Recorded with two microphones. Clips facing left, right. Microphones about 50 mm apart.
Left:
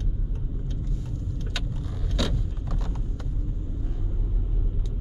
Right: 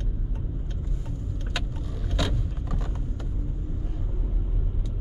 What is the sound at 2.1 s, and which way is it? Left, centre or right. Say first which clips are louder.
Vehicle: even; centre.